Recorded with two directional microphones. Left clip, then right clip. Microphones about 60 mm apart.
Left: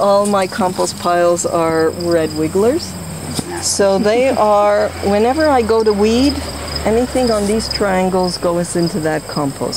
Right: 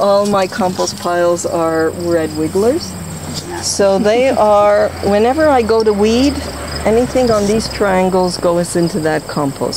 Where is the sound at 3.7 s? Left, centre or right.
Centre.